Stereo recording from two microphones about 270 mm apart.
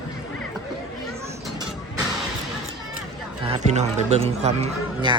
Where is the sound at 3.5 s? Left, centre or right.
Right.